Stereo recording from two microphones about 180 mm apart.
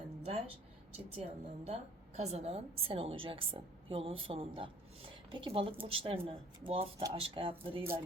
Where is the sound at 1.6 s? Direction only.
35° right (ahead or behind).